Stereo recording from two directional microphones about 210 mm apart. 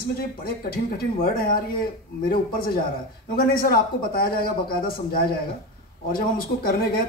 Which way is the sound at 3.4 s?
45° left (ahead or behind).